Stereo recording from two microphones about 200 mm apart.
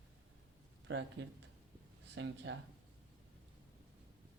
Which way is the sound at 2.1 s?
65° right (ahead or behind).